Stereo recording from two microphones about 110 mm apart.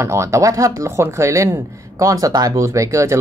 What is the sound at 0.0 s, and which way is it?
Speech, 25° right (ahead or behind).